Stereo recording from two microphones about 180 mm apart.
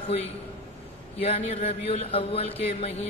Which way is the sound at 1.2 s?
35° left (ahead or behind).